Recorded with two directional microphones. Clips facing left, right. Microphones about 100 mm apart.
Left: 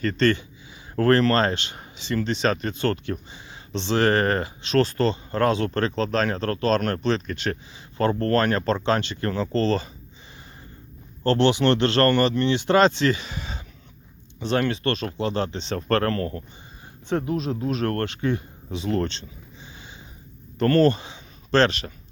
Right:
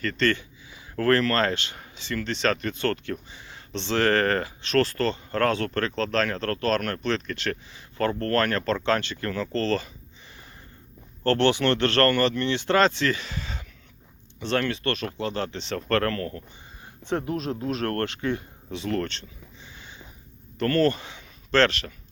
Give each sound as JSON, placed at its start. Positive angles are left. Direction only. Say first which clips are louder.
{"t": 0.0, "sound": "speech", "louder": "left 4 dB", "side_deg": 25}
{"t": 11.2, "sound": "speech", "louder": "left 2 dB", "side_deg": 20}
{"t": 14.7, "sound": "speech", "louder": "left 3 dB", "side_deg": 25}
{"t": 17.5, "sound": "speech", "louder": "left 1 dB", "side_deg": 15}
{"t": 19.6, "sound": "a sound", "louder": "left 2 dB", "side_deg": 15}
{"t": 20.6, "sound": "speech", "louder": "left 4 dB", "side_deg": 30}
{"t": 20.8, "sound": "speech", "louder": "left 3 dB", "side_deg": 20}